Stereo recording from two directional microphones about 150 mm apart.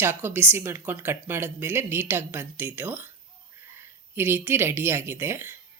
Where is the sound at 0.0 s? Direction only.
15° right (ahead or behind).